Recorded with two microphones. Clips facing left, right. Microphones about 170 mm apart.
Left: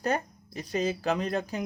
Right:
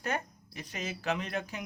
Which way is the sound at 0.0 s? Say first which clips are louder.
Left 6 dB; 35° left (ahead or behind).